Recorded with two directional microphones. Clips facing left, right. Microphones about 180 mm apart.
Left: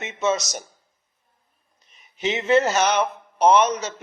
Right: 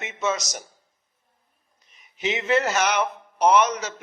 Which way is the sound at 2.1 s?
30° left (ahead or behind).